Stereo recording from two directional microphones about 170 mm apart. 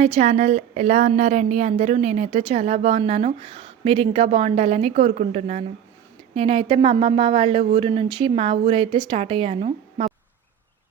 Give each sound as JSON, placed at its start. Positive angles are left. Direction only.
{"t": 0.0, "sound": "speech", "side_deg": -40}